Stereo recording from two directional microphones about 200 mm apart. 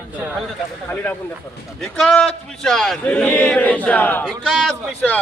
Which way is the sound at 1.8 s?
5° left (ahead or behind).